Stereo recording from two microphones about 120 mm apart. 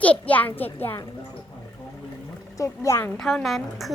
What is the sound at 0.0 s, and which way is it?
Speech, 10° left (ahead or behind).